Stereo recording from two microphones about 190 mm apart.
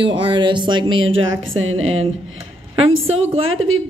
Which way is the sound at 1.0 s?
90° right.